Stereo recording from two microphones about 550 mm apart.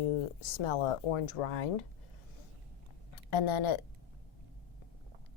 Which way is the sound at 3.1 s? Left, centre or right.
Left.